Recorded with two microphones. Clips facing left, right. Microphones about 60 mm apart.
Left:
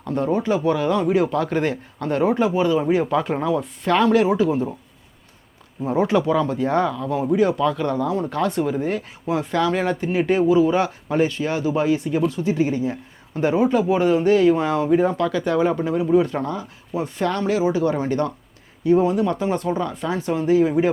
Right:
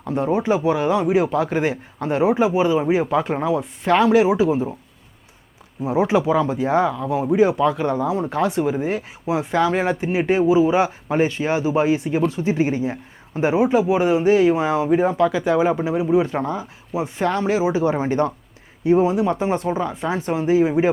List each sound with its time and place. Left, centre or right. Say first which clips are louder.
0.0 s speech: right 1 dB; centre
6.0 s speech: right 1 dB; centre